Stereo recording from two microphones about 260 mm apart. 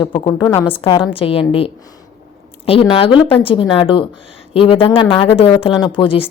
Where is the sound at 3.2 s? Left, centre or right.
Left.